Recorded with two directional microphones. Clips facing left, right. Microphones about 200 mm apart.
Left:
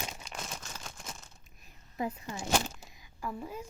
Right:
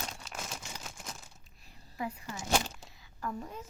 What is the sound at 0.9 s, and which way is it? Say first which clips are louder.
Crumpling: even; 5° right (ahead or behind).